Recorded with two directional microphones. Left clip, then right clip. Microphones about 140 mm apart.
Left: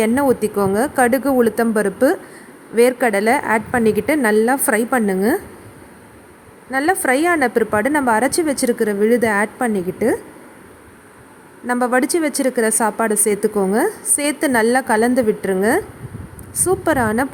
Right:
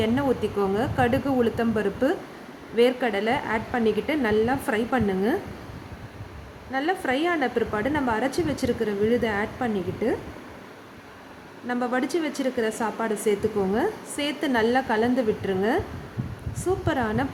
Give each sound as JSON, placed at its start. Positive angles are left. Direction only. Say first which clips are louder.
{"t": 0.0, "sound": "speech", "louder": "left 8 dB", "side_deg": 55}
{"t": 2.7, "sound": "a woman's voice", "louder": "left 7 dB", "side_deg": 60}
{"t": 6.7, "sound": "a woman's voice", "louder": "left 9 dB", "side_deg": 60}
{"t": 11.7, "sound": "a woman's voice", "louder": "left 9 dB", "side_deg": 55}